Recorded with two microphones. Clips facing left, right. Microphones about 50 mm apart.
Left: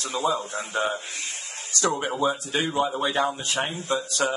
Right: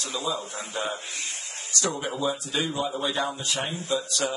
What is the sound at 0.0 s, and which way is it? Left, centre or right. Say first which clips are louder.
Speech: left 5 dB; left.